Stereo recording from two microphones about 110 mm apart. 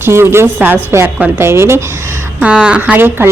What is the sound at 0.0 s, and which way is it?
A woman's voice, 20° right (ahead or behind).